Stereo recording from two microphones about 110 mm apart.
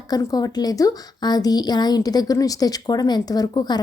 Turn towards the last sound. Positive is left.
turn(degrees=40)  # may be behind; listen again after turning